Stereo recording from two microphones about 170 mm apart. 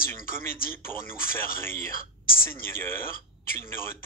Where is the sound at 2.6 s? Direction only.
15° left (ahead or behind).